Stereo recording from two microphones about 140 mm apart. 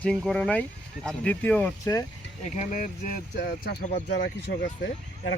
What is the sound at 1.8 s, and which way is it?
Speech, 25° left (ahead or behind).